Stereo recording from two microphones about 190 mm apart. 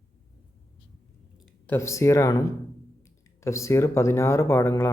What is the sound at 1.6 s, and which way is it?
Speech, 15° left (ahead or behind).